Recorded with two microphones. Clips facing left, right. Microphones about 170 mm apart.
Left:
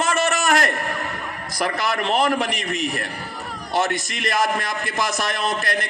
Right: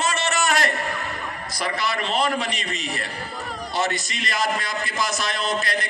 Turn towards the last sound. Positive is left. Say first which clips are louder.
# left 1 dB
turn(degrees=50)  # may be behind; listen again after turning